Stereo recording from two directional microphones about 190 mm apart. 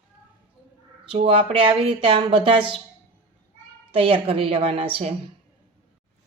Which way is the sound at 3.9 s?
30° right (ahead or behind).